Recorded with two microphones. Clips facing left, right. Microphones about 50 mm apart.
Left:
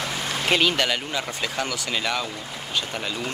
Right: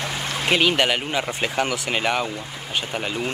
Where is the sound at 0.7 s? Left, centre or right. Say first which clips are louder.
Right 3 dB; right.